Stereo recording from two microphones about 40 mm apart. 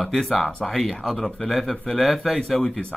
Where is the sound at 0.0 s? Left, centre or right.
Centre.